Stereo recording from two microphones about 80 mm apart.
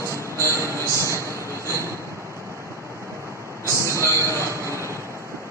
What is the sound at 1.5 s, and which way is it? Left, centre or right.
Train, right.